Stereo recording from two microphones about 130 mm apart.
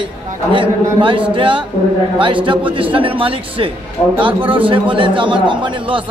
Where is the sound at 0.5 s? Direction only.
40° right (ahead or behind).